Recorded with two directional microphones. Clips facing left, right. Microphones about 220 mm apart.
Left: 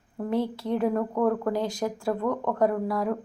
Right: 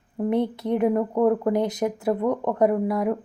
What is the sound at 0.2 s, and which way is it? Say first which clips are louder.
Speech: right 4 dB; 20° right (ahead or behind).